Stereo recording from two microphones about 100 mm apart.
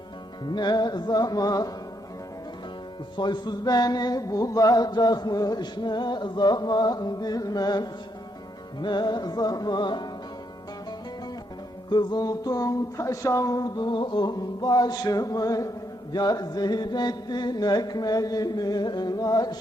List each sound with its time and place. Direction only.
0.4 s mantra: 45° left (ahead or behind)
3.2 s mantra: 45° left (ahead or behind)
11.9 s mantra: 45° left (ahead or behind)